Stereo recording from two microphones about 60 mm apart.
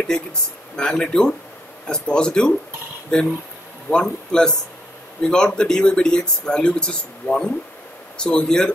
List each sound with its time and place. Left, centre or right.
0.7 s speech: centre